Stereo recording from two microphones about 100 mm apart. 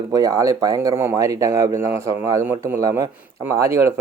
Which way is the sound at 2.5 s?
20° right (ahead or behind).